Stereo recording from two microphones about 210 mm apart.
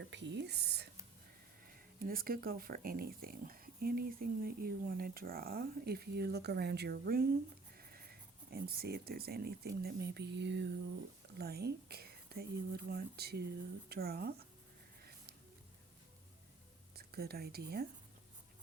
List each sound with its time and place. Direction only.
0.0 s speech: 55° right (ahead or behind)
2.0 s speech: 45° right (ahead or behind)
7.8 s a sound: 45° right (ahead or behind)
8.4 s speech: 45° right (ahead or behind)
16.9 s speech: 50° right (ahead or behind)